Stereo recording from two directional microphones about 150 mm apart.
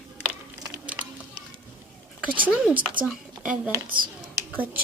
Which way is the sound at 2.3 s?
10° right (ahead or behind).